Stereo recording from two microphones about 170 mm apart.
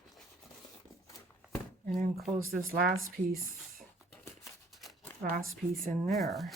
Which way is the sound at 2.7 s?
55° right (ahead or behind).